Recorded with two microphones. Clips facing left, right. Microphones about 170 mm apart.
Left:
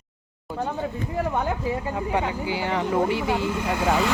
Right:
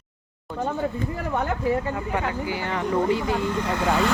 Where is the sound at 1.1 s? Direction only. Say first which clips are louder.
Left 1 dB; 10° left (ahead or behind).